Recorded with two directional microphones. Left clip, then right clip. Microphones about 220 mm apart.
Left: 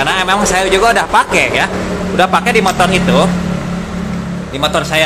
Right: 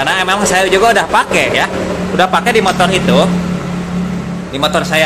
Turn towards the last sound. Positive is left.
turn(degrees=0)  # may be behind; listen again after turning